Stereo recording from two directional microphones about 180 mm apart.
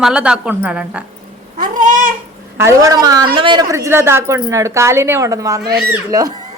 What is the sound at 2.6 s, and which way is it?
A woman's voice, 15° right (ahead or behind).